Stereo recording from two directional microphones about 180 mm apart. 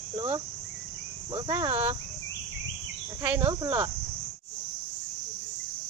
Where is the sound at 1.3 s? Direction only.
30° right (ahead or behind).